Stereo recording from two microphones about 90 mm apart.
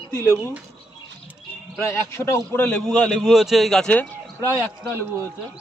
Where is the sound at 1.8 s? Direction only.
30° left (ahead or behind).